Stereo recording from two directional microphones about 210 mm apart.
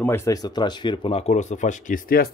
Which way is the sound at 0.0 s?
10° left (ahead or behind).